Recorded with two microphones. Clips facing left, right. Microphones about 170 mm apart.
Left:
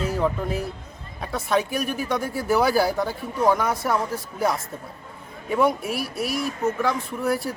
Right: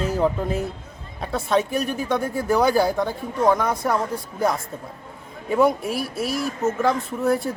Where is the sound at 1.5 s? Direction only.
25° right (ahead or behind).